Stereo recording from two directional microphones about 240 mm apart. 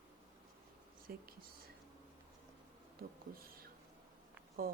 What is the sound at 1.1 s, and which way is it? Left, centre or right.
Speech, right.